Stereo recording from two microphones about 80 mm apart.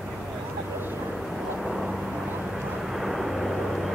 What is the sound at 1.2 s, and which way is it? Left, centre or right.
Vehicle, centre.